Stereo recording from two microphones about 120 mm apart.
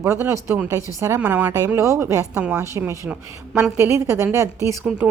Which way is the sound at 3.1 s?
15° right (ahead or behind).